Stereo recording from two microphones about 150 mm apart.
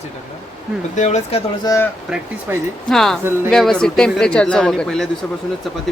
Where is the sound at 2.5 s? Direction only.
15° right (ahead or behind).